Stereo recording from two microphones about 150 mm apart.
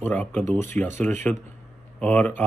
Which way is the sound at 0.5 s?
55° right (ahead or behind).